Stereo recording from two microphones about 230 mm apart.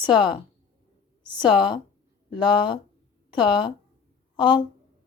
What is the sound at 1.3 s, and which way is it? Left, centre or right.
Speech, centre.